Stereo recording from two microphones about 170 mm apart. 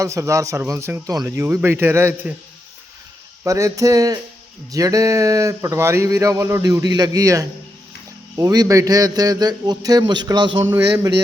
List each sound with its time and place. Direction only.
0.0 s speech: 20° right (ahead or behind)
3.4 s speech: 20° right (ahead or behind)
10.6 s speech: 15° right (ahead or behind)